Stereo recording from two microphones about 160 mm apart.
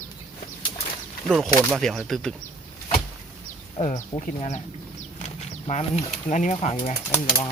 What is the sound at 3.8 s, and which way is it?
Speech, 50° left (ahead or behind).